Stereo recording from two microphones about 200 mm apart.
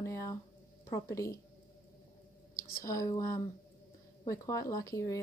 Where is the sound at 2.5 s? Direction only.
15° left (ahead or behind).